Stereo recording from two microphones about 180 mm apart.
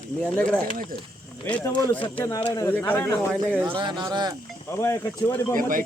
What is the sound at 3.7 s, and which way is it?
Speech, 25° right (ahead or behind).